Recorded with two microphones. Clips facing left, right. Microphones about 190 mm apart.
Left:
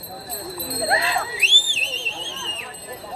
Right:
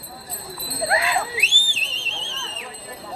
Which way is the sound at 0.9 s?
30° left (ahead or behind).